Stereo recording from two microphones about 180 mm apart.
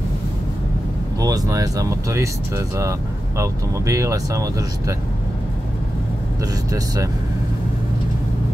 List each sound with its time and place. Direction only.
1.2 s speech: 20° right (ahead or behind)